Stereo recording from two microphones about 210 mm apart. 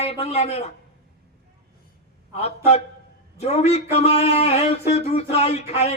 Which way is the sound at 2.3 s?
30° left (ahead or behind).